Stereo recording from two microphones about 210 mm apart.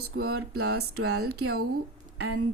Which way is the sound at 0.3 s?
90° right.